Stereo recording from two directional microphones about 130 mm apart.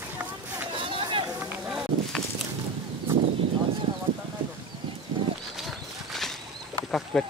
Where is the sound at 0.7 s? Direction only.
40° right (ahead or behind).